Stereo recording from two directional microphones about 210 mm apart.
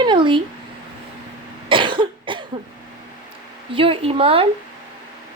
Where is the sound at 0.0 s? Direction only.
20° right (ahead or behind).